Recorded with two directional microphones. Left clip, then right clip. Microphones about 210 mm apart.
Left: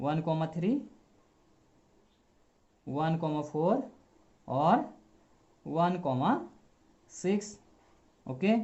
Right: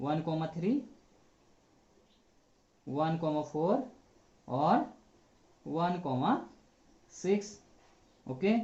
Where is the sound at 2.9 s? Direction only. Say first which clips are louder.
Even; 40° left (ahead or behind).